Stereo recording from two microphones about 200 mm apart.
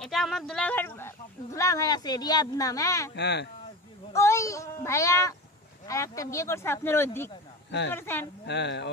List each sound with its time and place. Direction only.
0.0 s speech: centre (ahead or behind)
3.2 s speech: 55° left (ahead or behind)
4.1 s speech: 15° left (ahead or behind)
8.5 s speech: 60° left (ahead or behind)